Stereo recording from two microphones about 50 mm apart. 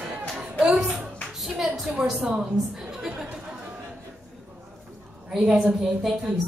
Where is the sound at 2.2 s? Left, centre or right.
Centre.